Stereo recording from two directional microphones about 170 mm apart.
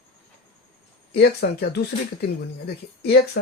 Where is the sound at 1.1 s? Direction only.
70° left (ahead or behind).